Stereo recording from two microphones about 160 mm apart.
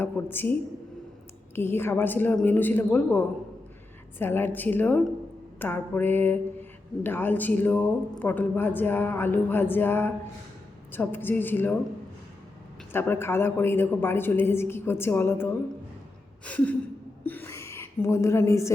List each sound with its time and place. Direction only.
0.0 s a woman's voice: 15° left (ahead or behind)
1.5 s a woman's voice: 15° left (ahead or behind)
12.9 s a woman's voice: 15° left (ahead or behind)
17.2 s gasp: 15° left (ahead or behind)